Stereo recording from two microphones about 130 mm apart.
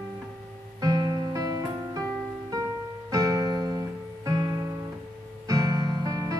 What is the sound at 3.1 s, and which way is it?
Music, 30° right (ahead or behind).